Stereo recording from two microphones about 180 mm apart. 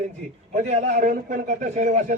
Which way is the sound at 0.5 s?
40° right (ahead or behind).